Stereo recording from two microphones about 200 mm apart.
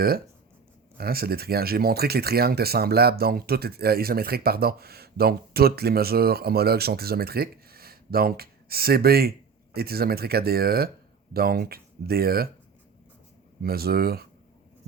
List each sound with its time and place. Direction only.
0.9 s speech: 50° right (ahead or behind)
13.6 s speech: 50° right (ahead or behind)